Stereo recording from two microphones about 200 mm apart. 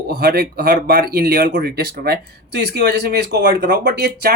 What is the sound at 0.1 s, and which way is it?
Speech, 50° right (ahead or behind).